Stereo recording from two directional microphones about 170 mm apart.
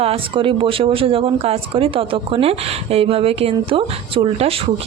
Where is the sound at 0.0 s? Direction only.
30° right (ahead or behind).